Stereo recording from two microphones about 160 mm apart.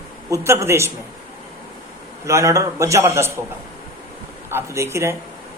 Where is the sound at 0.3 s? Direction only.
20° right (ahead or behind).